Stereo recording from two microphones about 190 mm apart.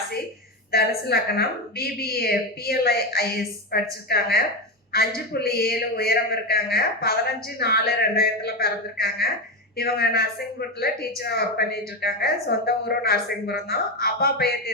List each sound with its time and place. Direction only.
0.7 s a woman's voice: 55° left (ahead or behind)